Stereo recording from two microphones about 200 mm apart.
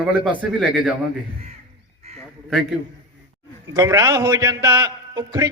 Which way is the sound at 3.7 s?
15° right (ahead or behind).